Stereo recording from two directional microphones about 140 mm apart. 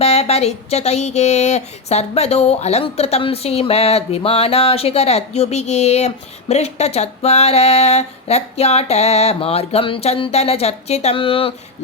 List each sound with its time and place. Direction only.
0.0 s speech: 45° left (ahead or behind)